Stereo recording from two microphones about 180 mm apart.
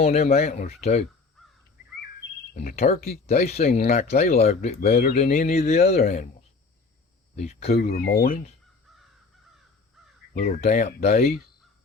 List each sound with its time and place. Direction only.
0.0 s speech: 35° left (ahead or behind)
1.4 s crow: centre (ahead or behind)
2.5 s speech: 50° left (ahead or behind)
2.7 s speech: 40° left (ahead or behind)
7.3 s speech: 35° left (ahead or behind)
7.8 s speech: 55° left (ahead or behind)
10.3 s speech: 40° left (ahead or behind)